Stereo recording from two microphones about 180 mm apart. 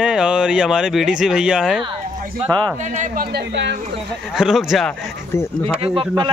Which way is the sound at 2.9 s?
45° right (ahead or behind).